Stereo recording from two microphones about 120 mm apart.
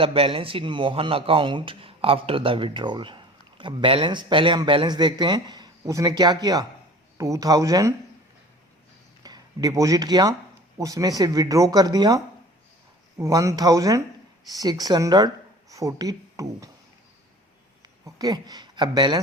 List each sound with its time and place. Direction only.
0.0 s a man's voice: 50° right (ahead or behind); by 7.9 s 30° right (ahead or behind)
9.2 s speech: 35° right (ahead or behind)
18.0 s a woman's voice: 30° right (ahead or behind)